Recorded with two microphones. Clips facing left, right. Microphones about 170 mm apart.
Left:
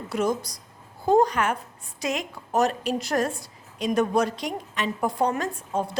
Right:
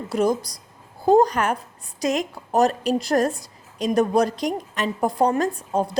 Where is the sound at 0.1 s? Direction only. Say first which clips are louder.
Right 4 dB; 35° right (ahead or behind).